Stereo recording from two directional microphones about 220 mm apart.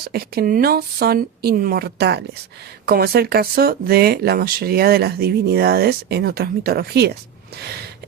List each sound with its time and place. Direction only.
0.1 s speech: 40° right (ahead or behind)